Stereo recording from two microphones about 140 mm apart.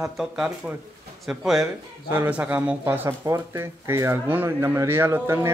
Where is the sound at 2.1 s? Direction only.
15° right (ahead or behind).